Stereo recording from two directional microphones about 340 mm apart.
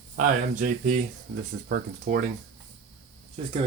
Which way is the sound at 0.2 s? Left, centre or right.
Right.